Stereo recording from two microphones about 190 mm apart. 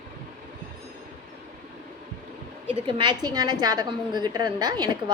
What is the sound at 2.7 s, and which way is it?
A woman's voice, 25° right (ahead or behind).